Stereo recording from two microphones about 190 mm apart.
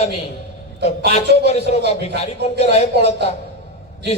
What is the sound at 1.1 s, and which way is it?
Speech, 35° left (ahead or behind).